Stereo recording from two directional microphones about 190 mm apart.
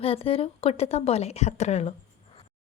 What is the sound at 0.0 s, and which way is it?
A woman's voice, 30° left (ahead or behind).